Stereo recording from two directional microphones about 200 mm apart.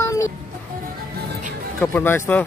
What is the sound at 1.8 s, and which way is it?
Speech, 10° left (ahead or behind).